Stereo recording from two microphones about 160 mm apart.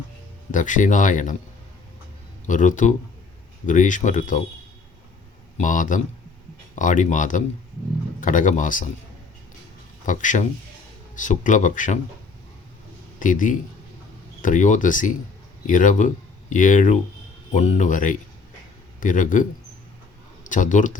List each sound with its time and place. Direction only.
0.5 s speech: 50° left (ahead or behind)
2.5 s speech: 50° left (ahead or behind)
5.5 s a man's voice: 55° left (ahead or behind)
10.1 s speech: 50° left (ahead or behind)
13.1 s speech: 55° left (ahead or behind)